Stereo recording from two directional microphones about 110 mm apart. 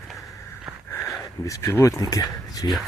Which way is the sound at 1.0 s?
25° left (ahead or behind).